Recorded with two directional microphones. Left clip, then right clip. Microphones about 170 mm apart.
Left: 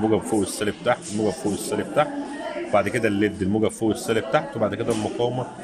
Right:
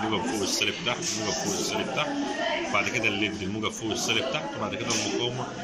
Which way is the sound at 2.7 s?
80° left.